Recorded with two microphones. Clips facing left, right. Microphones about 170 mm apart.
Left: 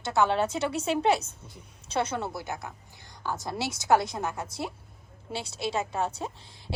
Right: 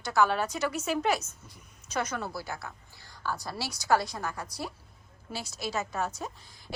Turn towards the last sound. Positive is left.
turn(degrees=30)  # may be behind; listen again after turning